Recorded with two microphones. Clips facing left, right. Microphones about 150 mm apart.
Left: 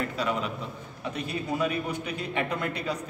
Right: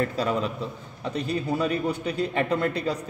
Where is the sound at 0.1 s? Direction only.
35° right (ahead or behind).